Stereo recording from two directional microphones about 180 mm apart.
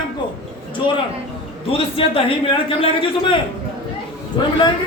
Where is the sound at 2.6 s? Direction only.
30° left (ahead or behind).